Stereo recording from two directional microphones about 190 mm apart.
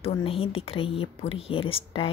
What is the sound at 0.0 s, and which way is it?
A woman's voice, 30° left (ahead or behind).